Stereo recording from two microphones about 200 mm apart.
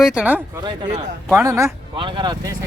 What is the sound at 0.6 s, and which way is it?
Speech, 20° right (ahead or behind).